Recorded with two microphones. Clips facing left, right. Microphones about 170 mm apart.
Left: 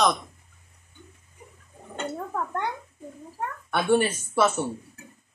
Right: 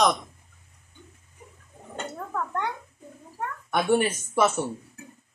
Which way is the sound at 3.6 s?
15° right (ahead or behind).